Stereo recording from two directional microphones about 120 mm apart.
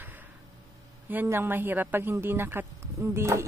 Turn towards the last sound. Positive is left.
turn(degrees=-20)  # may be behind; listen again after turning